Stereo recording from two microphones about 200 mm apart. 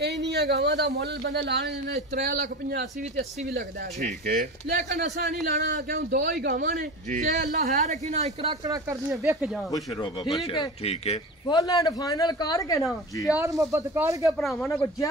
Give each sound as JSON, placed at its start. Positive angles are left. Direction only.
{"t": 0.0, "sound": "speech", "side_deg": -55}
{"t": 2.1, "sound": "a man's voice", "side_deg": -40}
{"t": 5.2, "sound": "a man's voice", "side_deg": -55}
{"t": 10.4, "sound": "a man's voice", "side_deg": 25}
{"t": 13.3, "sound": "a man's voice", "side_deg": -15}